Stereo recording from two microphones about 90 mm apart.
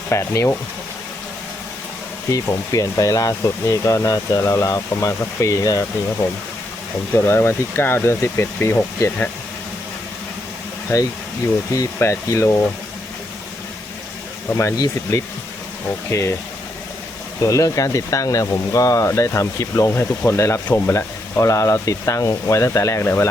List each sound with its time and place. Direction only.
0.1 s speech: 30° left (ahead or behind)
2.3 s speech: 40° left (ahead or behind)
7.1 s speech: 25° left (ahead or behind)
11.7 s speech: 35° left (ahead or behind)
14.5 s speech: 35° left (ahead or behind)
17.4 s speech: 35° left (ahead or behind)